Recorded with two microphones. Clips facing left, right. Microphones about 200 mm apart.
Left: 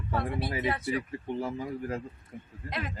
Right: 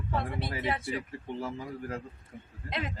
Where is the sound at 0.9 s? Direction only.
15° left (ahead or behind).